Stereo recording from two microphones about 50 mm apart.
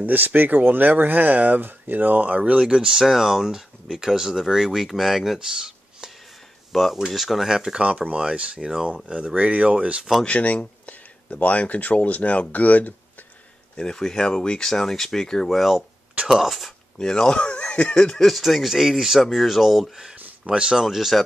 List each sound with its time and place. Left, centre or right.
0.0 s speech: right
2.7 s speech: centre
6.7 s speech: centre
7.8 s speech: right; by 8.8 s centre
9.3 s speech: right
10.2 s speech: left
13.7 s speech: centre
17.1 s speech: centre
18.2 s speech: centre
20.4 s speech: centre
20.7 s speech: centre